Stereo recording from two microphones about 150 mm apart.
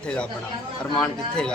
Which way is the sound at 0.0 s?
5° left (ahead or behind).